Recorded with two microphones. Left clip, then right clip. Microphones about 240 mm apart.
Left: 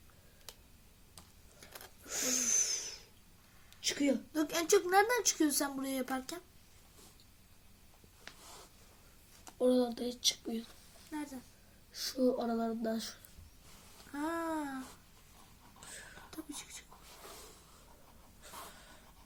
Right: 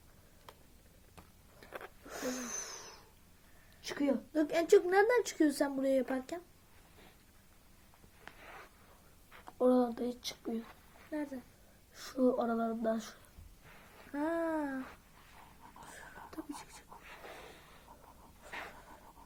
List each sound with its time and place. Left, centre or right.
2.0 s a sound: centre
4.4 s speech: centre
9.6 s speech: centre
12.2 s speech: centre
15.9 s whispering: centre